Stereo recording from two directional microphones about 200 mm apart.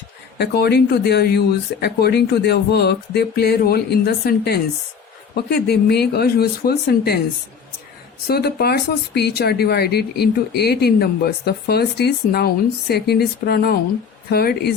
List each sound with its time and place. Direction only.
0.3 s speech: 55° left (ahead or behind)
8.3 s speech: 50° left (ahead or behind)